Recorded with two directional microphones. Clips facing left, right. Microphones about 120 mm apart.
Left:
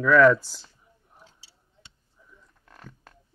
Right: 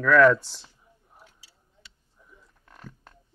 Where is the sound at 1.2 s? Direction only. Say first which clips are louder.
Left 1 dB; 30° left (ahead or behind).